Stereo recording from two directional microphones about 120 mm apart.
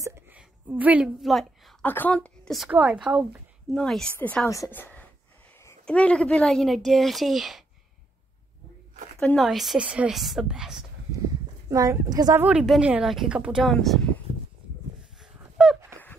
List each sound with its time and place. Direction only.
0.3 s a sound: 10° right (ahead or behind)
1.2 s a sound: centre (ahead or behind)
1.9 s a woman's voice: 15° left (ahead or behind)
2.7 s speech: 10° right (ahead or behind)
3.7 s a woman's voice: 5° left (ahead or behind)
9.2 s speech: 5° left (ahead or behind)
11.7 s a woman's voice: 30° right (ahead or behind)
12.4 s speech: 10° right (ahead or behind)
13.7 s a woman's voice: 5° left (ahead or behind)
15.5 s dog: 5° right (ahead or behind)